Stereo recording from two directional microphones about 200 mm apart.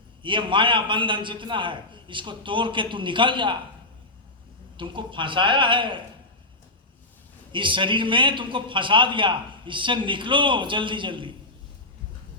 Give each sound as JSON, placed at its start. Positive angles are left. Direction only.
{"t": 0.2, "sound": "a man's voice", "side_deg": -25}
{"t": 4.8, "sound": "a man's voice", "side_deg": -25}
{"t": 7.5, "sound": "a man's voice", "side_deg": -25}